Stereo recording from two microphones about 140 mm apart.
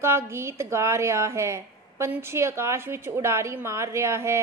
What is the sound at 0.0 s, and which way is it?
A woman's voice, 20° right (ahead or behind).